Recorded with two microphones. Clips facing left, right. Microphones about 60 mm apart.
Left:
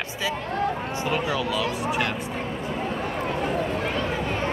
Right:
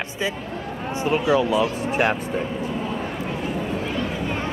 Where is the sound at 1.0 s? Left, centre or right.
Right.